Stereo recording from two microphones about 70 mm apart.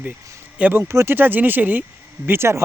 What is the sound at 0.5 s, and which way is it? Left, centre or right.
Speech, right.